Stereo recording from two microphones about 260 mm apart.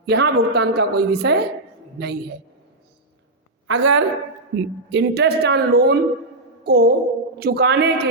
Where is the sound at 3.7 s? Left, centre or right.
Right.